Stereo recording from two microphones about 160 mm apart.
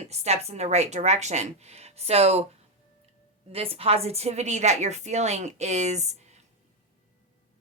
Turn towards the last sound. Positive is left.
turn(degrees=-45)  # may be behind; listen again after turning